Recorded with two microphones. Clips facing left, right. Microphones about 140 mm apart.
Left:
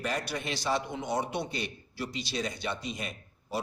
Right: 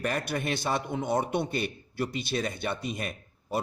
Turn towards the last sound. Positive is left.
turn(degrees=-55)  # may be behind; listen again after turning